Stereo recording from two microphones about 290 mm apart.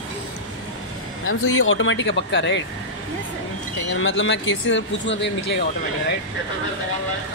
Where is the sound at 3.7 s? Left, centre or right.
Left.